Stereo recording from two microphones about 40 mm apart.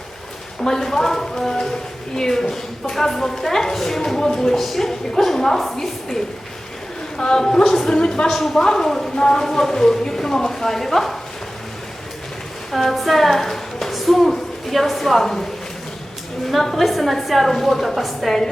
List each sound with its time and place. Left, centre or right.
0.6 s a woman's voice: centre
7.2 s a woman's voice: left
8.3 s a woman's voice: centre
8.5 s a woman's voice: centre
12.7 s a woman's voice: centre
16.5 s a woman's voice: centre